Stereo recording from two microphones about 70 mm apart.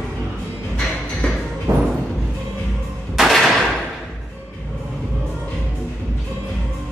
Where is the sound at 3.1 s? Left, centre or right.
Centre.